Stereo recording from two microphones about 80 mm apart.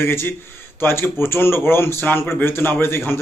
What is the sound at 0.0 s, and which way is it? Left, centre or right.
A man's voice, left.